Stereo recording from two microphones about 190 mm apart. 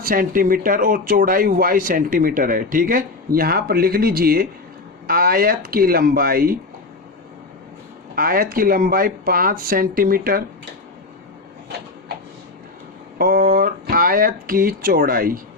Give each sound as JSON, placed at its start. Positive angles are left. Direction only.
{"t": 0.0, "sound": "speech", "side_deg": -50}
{"t": 8.1, "sound": "speech", "side_deg": -50}
{"t": 13.1, "sound": "speech", "side_deg": -55}